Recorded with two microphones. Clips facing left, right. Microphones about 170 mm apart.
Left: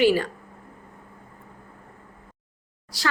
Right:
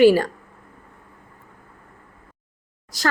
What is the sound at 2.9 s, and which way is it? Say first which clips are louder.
Speech: right 4 dB; 45° right (ahead or behind).